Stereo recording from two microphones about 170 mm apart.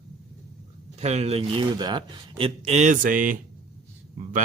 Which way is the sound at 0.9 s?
40° right (ahead or behind).